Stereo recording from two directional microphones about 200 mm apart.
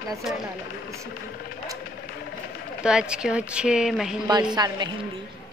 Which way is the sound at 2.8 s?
5° right (ahead or behind).